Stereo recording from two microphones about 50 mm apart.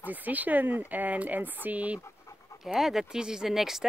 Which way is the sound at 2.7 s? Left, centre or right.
Centre.